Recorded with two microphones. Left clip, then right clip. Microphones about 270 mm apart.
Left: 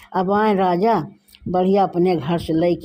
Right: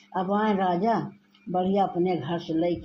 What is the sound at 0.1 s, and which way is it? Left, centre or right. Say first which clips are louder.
Speech: left 8 dB; left.